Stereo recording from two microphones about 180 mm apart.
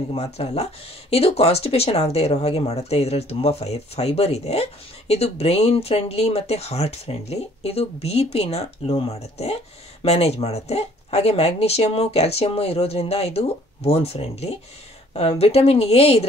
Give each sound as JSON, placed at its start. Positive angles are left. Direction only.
{"t": 0.1, "sound": "speech", "side_deg": 35}